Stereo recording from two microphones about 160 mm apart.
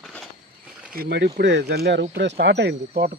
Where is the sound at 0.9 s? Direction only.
80° right.